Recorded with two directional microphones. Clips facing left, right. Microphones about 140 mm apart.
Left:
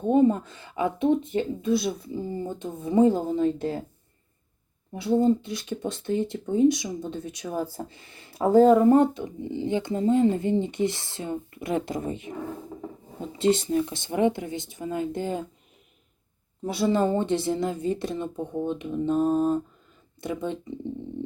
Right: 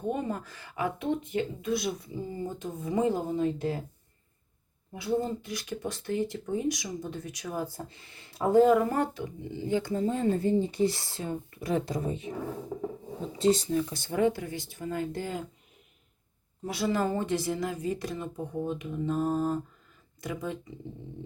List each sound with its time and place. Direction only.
0.0 s speech: 25° left (ahead or behind)
4.9 s speech: 25° left (ahead or behind)
13.6 s speech: 25° left (ahead or behind)
16.7 s speech: 25° left (ahead or behind)